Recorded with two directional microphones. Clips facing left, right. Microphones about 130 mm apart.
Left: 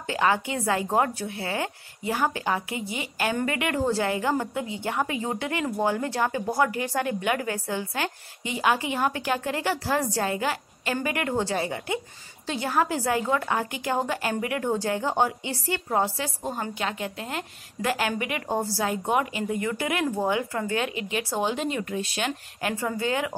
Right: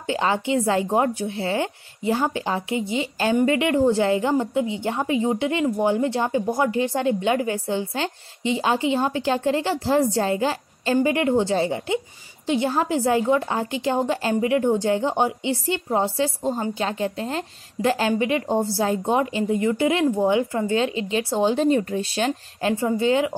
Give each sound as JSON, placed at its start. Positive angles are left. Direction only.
{"t": 0.0, "sound": "a woman's voice", "side_deg": -25}